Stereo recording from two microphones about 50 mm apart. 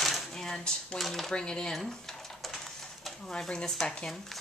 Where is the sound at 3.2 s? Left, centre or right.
Centre.